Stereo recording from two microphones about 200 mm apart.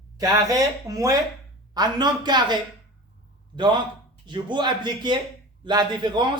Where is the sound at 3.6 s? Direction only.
25° right (ahead or behind).